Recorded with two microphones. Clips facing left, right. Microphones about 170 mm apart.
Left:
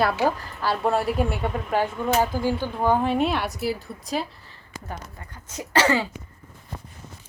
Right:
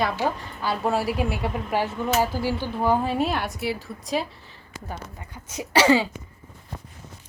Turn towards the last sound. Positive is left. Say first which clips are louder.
# right 3 dB
turn(degrees=-15)  # may be behind; listen again after turning